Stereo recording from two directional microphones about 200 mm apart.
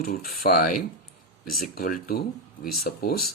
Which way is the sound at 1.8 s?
45° left (ahead or behind).